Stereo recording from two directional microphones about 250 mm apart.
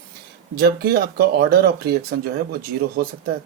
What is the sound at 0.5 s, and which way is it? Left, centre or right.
Speech, right.